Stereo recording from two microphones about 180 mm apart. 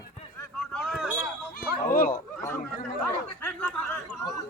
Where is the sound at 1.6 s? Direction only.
55° left (ahead or behind).